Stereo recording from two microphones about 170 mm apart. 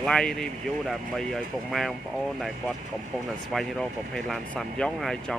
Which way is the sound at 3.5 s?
5° left (ahead or behind).